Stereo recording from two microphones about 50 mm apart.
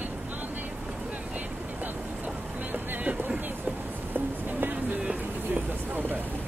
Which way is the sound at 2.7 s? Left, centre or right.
Right.